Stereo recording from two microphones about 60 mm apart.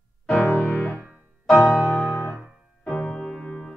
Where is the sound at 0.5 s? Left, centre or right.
Left.